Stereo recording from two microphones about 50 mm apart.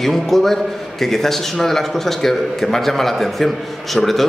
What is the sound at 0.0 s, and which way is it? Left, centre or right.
A man's voice, centre.